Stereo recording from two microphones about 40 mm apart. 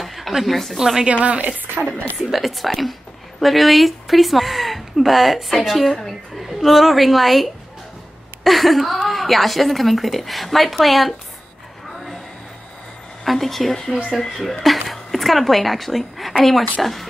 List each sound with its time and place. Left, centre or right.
0.0 s a sound: centre
0.7 s speech: centre
1.0 s speech: right
2.1 s a woman's voice: centre
13.2 s a woman's voice: centre